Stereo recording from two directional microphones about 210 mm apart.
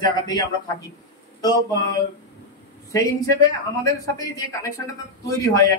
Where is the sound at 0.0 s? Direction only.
20° left (ahead or behind).